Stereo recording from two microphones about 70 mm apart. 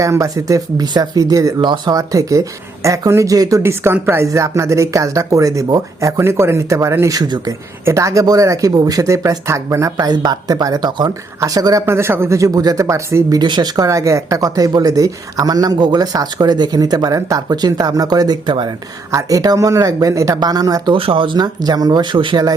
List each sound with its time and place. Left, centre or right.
0.0 s speech: right
1.6 s speech: right
3.6 s a man's voice: right
7.0 s speech: right
7.9 s speech: right
10.1 s speech: right
11.3 s speech: right
11.9 s a man's voice: right
12.4 s speech: right
13.3 s speech: right
13.8 s speech: right
19.1 s speech: right
20.4 s speech: right
21.3 s speech: right